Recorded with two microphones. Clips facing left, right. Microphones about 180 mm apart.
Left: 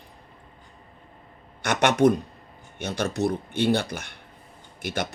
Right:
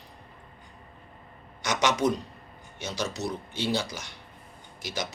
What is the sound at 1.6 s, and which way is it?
Speech, 60° left (ahead or behind).